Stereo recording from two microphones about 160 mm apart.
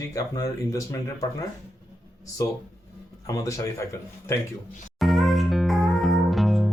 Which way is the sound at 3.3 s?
20° left (ahead or behind).